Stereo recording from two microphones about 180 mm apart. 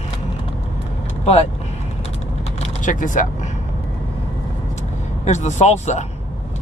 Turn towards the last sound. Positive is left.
turn(degrees=40)  # may be behind; listen again after turning